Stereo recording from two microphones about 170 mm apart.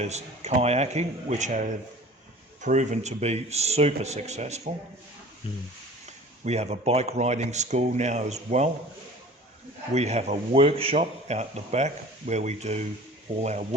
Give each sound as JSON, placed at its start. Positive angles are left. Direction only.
{"t": 0.0, "sound": "speech", "side_deg": -40}
{"t": 5.5, "sound": "speech", "side_deg": 30}
{"t": 6.4, "sound": "speech", "side_deg": -40}
{"t": 9.9, "sound": "speech", "side_deg": -40}